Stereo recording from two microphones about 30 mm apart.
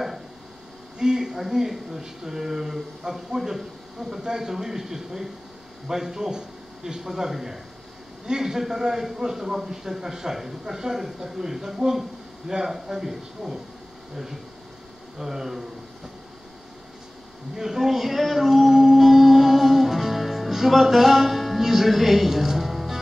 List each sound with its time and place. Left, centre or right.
0.9 s a sound: right
1.5 s a man's voice: centre
17.6 s a man's voice: centre
18.4 s music: centre
21.4 s speech: centre